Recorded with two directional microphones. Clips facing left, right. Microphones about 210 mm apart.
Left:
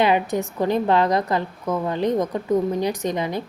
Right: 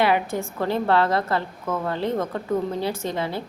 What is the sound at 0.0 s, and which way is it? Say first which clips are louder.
A woman's voice: left 2 dB; 20° left (ahead or behind).